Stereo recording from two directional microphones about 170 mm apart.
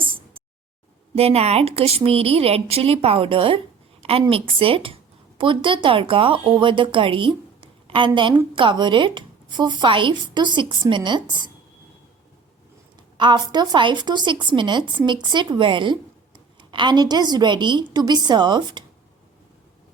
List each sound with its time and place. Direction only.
0.0 s a sound: 30° right (ahead or behind)
1.1 s a woman's voice: 35° right (ahead or behind)
13.1 s a woman's voice: 25° right (ahead or behind)